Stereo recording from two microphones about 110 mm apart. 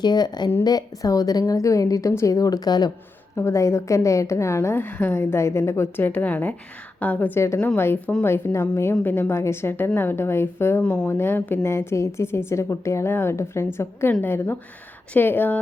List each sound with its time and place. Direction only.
0.0 s a woman's voice: 40° left (ahead or behind)
3.3 s a woman's voice: 25° left (ahead or behind)
10.8 s speech: 10° left (ahead or behind)
11.1 s a woman's voice: 20° left (ahead or behind)